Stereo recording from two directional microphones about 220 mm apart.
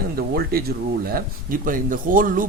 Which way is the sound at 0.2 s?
45° right (ahead or behind).